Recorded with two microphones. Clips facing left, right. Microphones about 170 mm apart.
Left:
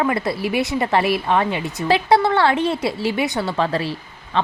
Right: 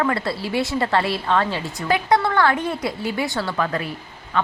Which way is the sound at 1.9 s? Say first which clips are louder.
Left 3 dB; 30° left (ahead or behind).